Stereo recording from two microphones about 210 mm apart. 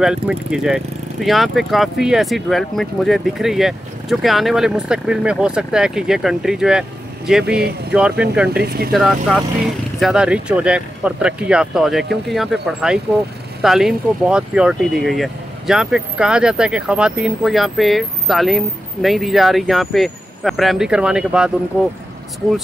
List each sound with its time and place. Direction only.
0.0 s speech: 5° right (ahead or behind)
8.5 s speech: 45° right (ahead or behind)
8.9 s speech: centre (ahead or behind)